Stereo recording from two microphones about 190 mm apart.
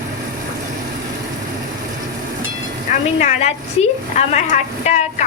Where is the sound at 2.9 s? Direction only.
35° left (ahead or behind).